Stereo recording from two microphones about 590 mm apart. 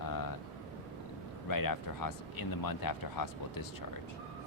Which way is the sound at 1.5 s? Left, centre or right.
Left.